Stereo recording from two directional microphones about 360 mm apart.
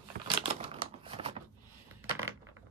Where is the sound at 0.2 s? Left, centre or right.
Right.